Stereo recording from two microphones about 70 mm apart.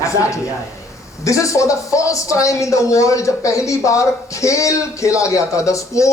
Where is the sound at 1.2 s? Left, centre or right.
Left.